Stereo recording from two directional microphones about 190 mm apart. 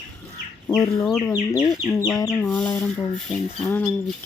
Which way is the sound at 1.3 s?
15° left (ahead or behind).